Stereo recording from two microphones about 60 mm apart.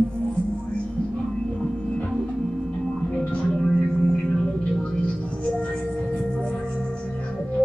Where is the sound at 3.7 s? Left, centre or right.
Centre.